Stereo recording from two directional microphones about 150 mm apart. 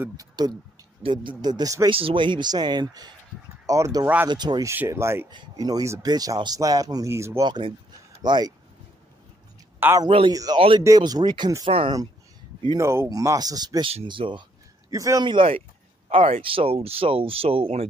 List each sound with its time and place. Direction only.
0.4 s speech: 25° right (ahead or behind)
1.9 s speech: 35° right (ahead or behind)
4.7 s speech: 15° right (ahead or behind)
7.4 s speech: 30° right (ahead or behind)
9.8 s speech: 15° right (ahead or behind)
10.0 s speech: 35° right (ahead or behind)
13.8 s speech: 35° right (ahead or behind)
14.9 s speech: 20° right (ahead or behind); by 17.8 s 40° right (ahead or behind)